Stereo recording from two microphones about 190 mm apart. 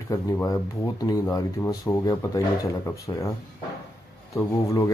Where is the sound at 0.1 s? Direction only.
15° left (ahead or behind).